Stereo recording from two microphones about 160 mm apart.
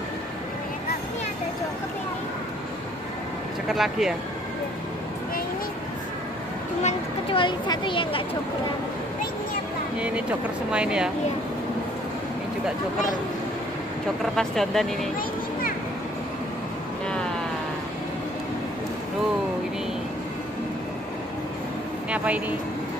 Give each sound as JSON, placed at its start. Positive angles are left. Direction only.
{"t": 3.6, "sound": "speech", "side_deg": 0}
{"t": 6.8, "sound": "speech", "side_deg": 45}
{"t": 7.3, "sound": "speech", "side_deg": 30}
{"t": 9.9, "sound": "speech", "side_deg": -10}
{"t": 14.3, "sound": "speech", "side_deg": 0}
{"t": 22.1, "sound": "speech", "side_deg": -10}